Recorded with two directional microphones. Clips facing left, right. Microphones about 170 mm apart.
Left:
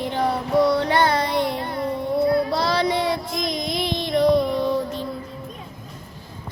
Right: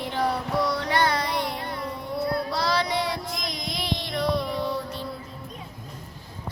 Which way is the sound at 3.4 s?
20° left (ahead or behind).